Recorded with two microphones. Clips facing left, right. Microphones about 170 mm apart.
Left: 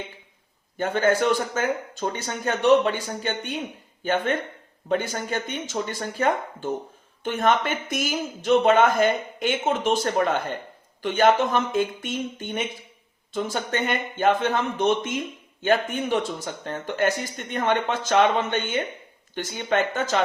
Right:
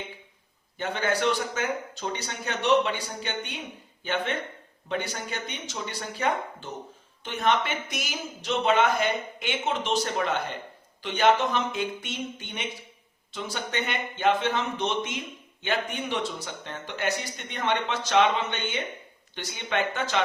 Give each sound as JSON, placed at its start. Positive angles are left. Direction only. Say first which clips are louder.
{"t": 0.8, "sound": "speech", "louder": "left 6 dB", "side_deg": 45}